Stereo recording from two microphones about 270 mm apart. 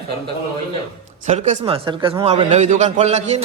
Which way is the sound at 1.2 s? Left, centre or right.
Right.